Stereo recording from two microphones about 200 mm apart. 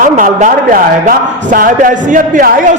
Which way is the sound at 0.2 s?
40° right (ahead or behind).